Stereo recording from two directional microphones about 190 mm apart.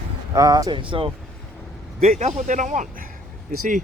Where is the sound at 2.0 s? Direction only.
40° right (ahead or behind).